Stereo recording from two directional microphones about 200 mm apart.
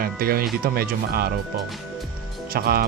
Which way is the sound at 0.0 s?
50° right (ahead or behind).